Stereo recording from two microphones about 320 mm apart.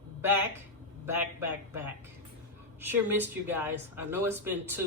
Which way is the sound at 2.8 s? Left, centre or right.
Centre.